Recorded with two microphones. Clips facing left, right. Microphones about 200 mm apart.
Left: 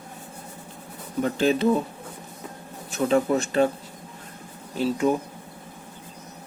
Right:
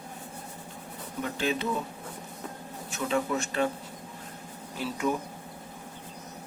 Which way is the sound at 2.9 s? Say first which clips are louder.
Left 8 dB; 35° left (ahead or behind).